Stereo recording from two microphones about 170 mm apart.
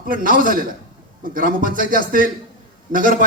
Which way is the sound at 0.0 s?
55° right (ahead or behind).